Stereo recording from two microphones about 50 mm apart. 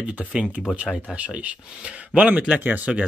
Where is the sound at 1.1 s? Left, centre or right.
Right.